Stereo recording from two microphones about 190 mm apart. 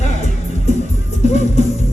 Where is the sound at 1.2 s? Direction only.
35° left (ahead or behind).